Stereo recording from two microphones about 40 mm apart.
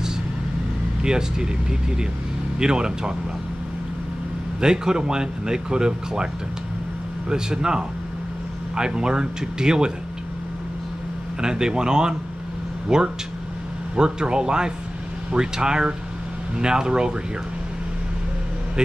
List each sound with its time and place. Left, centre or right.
1.0 s speech: centre
4.6 s speech: centre
7.2 s speech: centre
11.4 s speech: centre